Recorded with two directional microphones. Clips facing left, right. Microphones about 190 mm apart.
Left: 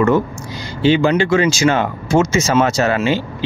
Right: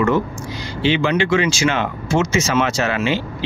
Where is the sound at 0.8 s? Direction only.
40° left (ahead or behind).